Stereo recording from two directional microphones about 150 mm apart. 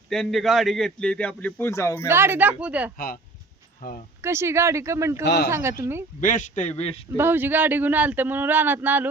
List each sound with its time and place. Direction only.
0.1 s a man's voice: centre (ahead or behind); by 2.0 s 20° left (ahead or behind)
2.0 s speech: 15° right (ahead or behind)
4.2 s speech: 15° right (ahead or behind)
5.2 s speech: 90° left
5.5 s speech: 15° right (ahead or behind)
6.1 s a man's voice: 60° left (ahead or behind)
7.2 s speech: 15° right (ahead or behind)